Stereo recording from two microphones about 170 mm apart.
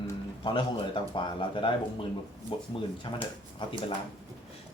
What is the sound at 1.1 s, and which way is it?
Speech, 30° left (ahead or behind).